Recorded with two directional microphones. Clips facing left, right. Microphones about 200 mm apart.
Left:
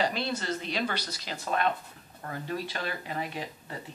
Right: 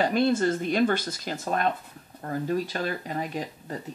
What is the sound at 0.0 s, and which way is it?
Speech, 50° right (ahead or behind).